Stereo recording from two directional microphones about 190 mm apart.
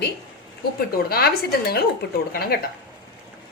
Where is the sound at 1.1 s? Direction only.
55° left (ahead or behind).